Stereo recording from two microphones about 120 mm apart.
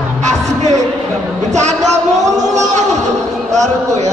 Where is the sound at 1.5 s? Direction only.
75° right (ahead or behind).